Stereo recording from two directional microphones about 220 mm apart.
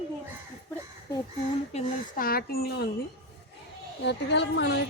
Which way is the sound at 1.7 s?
40° left (ahead or behind).